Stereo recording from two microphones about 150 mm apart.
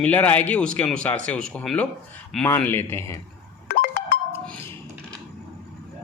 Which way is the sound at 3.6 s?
70° left (ahead or behind).